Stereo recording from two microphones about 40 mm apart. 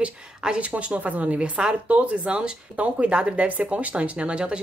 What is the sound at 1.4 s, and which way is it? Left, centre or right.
Speech, right.